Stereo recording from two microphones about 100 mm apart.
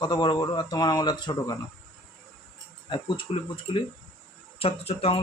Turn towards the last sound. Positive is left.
turn(degrees=80)